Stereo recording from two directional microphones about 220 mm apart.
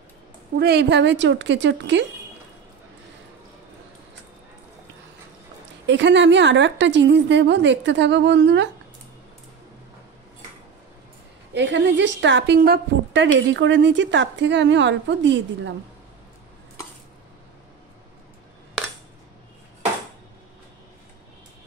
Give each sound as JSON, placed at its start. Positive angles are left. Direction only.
{"t": 0.6, "sound": "a woman's voice", "side_deg": -50}
{"t": 5.9, "sound": "a woman's voice", "side_deg": -55}
{"t": 11.5, "sound": "a woman's voice", "side_deg": -55}